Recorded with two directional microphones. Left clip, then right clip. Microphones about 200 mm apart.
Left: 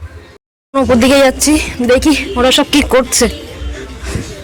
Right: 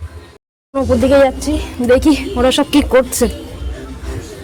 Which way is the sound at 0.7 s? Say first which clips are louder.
Left 2 dB; 15° left (ahead or behind).